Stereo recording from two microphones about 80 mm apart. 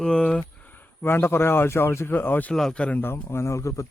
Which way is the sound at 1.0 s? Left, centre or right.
Left.